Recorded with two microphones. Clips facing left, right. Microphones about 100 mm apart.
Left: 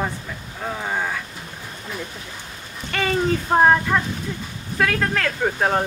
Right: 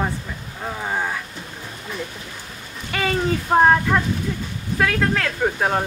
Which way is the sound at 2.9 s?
5° right (ahead or behind).